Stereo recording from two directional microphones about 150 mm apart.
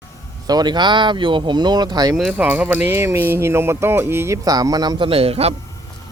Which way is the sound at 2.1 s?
5° right (ahead or behind).